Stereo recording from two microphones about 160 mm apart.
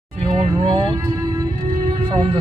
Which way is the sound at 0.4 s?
35° right (ahead or behind).